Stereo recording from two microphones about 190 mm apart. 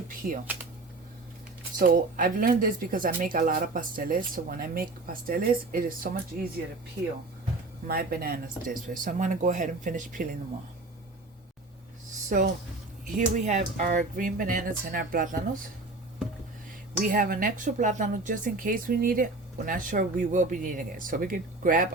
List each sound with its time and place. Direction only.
0.1 s speech: 45° right (ahead or behind)
1.8 s speech: 50° right (ahead or behind)
7.9 s speech: 50° right (ahead or behind)
12.1 s a sound: 40° right (ahead or behind)
13.1 s speech: 40° right (ahead or behind)
17.0 s speech: 45° right (ahead or behind)